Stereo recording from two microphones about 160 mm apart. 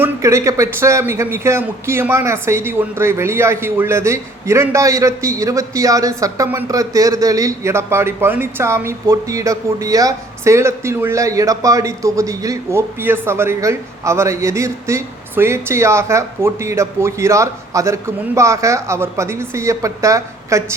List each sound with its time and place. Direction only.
0.0 s a man's voice: 20° right (ahead or behind)